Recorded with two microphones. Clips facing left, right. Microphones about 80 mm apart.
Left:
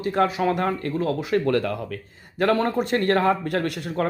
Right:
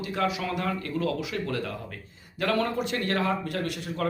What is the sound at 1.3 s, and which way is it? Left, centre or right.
Speech, left.